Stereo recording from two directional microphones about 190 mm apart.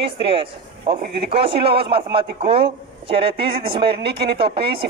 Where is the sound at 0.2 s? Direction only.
30° right (ahead or behind).